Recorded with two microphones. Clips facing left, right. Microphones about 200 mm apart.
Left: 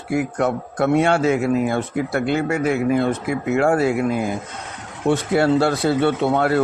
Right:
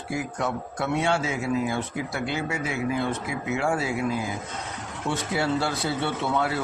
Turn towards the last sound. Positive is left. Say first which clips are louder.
# left 8 dB
turn(degrees=60)  # may be behind; listen again after turning